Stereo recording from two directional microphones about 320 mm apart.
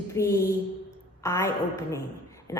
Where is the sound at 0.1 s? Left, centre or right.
Centre.